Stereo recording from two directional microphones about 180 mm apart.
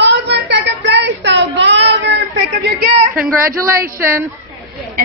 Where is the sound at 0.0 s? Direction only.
75° right (ahead or behind).